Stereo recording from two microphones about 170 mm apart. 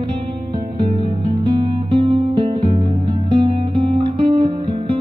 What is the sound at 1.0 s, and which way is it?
Music, 30° right (ahead or behind).